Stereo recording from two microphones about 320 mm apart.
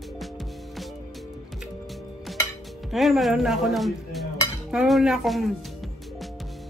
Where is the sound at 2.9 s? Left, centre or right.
Centre.